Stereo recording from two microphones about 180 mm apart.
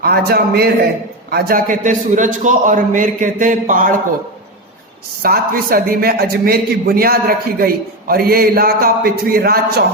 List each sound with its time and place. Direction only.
0.0 s a man's voice: 60° right (ahead or behind)
5.2 s a man's voice: 55° right (ahead or behind)